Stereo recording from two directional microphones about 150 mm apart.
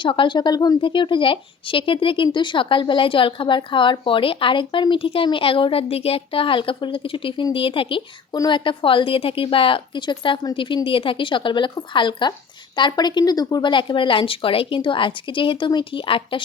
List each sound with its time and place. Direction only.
0.0 s speech: 35° left (ahead or behind)